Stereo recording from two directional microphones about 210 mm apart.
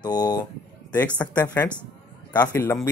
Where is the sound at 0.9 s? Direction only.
5° left (ahead or behind).